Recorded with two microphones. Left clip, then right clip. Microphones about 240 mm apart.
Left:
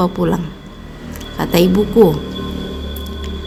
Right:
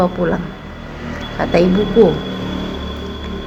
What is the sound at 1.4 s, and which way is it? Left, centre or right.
Speech, left.